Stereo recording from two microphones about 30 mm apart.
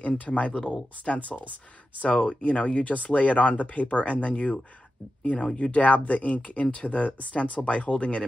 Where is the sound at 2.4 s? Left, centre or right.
Left.